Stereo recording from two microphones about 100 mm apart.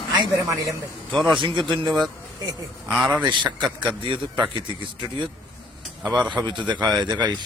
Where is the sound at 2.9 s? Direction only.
5° right (ahead or behind).